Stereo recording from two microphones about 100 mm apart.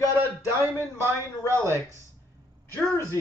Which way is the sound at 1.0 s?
25° right (ahead or behind).